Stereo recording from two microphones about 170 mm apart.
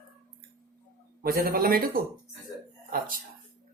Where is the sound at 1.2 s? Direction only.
60° right (ahead or behind).